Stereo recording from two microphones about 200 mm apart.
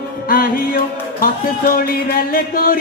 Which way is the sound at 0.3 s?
45° left (ahead or behind).